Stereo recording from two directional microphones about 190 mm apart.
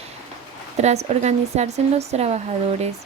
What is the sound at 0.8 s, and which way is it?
Speech, 35° right (ahead or behind).